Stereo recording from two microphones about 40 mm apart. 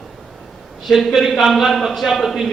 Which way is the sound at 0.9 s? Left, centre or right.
Centre.